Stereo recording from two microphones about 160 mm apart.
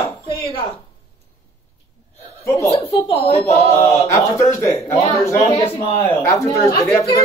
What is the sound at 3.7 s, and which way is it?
Speech, 20° left (ahead or behind).